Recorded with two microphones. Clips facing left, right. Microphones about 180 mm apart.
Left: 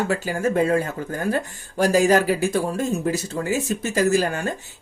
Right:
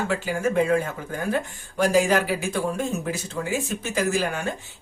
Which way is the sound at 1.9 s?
40° left (ahead or behind).